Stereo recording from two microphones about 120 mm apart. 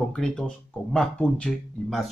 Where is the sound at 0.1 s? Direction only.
5° left (ahead or behind).